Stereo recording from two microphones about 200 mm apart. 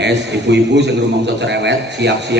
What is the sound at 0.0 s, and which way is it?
A man's voice, 60° right (ahead or behind).